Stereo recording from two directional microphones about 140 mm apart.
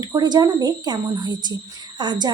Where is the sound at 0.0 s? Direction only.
30° right (ahead or behind).